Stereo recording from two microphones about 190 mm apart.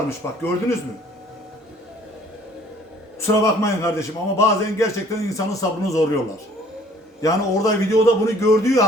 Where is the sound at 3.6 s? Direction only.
15° left (ahead or behind).